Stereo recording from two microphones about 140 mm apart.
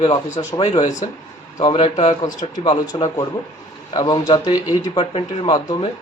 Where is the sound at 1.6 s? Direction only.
35° left (ahead or behind).